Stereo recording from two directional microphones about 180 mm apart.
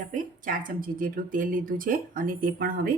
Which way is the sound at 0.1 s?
45° right (ahead or behind).